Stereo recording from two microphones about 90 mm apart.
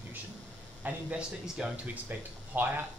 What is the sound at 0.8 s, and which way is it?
Speech, 15° right (ahead or behind).